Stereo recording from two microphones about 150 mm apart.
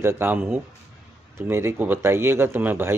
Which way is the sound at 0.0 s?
15° right (ahead or behind).